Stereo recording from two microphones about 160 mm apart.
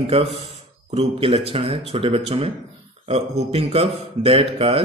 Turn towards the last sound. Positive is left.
turn(degrees=-35)  # may be behind; listen again after turning